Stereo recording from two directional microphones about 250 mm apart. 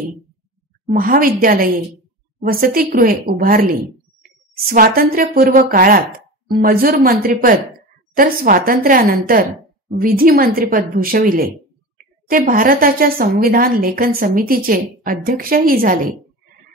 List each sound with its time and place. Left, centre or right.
0.8 s a woman's voice: right